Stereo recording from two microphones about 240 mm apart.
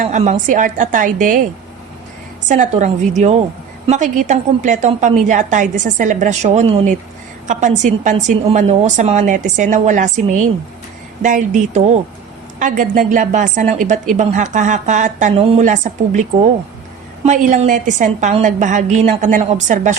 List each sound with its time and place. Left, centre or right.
0.0 s a woman's voice: right
2.5 s a woman's voice: right
11.2 s a woman's voice: right